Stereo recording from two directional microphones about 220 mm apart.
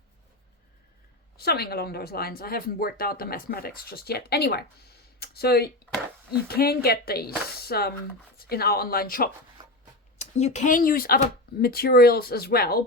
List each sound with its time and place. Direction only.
1.4 s speech: 45° left (ahead or behind)
10.2 s speech: 30° left (ahead or behind)